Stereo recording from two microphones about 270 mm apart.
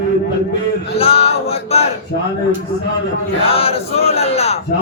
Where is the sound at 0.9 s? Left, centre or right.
Left.